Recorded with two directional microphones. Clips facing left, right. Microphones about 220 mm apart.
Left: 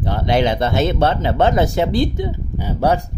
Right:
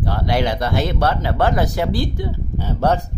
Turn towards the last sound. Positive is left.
turn(degrees=10)  # may be behind; listen again after turning